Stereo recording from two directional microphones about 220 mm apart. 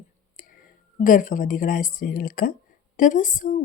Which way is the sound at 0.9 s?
35° left (ahead or behind).